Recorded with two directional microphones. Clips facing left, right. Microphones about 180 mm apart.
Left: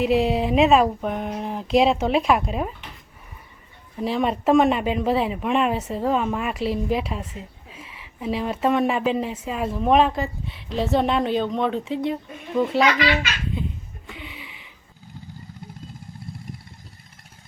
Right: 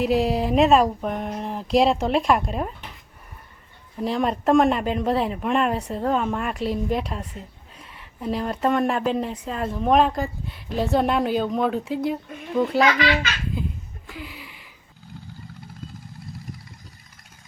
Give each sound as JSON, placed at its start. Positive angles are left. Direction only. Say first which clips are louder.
{"t": 0.0, "sound": "speech", "louder": "left 1 dB", "side_deg": 0}
{"t": 3.9, "sound": "speech", "louder": "even", "side_deg": 0}
{"t": 14.1, "sound": "a sound", "louder": "right 1 dB", "side_deg": 0}